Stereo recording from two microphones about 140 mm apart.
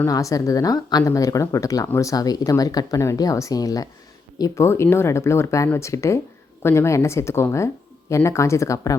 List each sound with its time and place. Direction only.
0.0 s speech: 25° left (ahead or behind)